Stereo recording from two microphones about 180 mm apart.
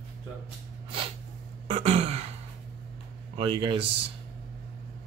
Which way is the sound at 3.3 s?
25° right (ahead or behind).